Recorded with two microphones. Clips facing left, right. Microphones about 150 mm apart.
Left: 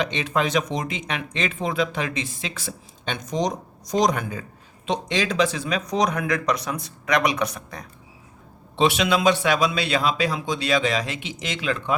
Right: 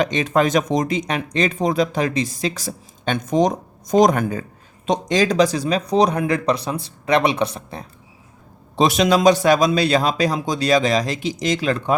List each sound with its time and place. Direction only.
0.0 s a man's voice: 45° right (ahead or behind); by 7.9 s 30° right (ahead or behind)
8.7 s a man's voice: 40° right (ahead or behind)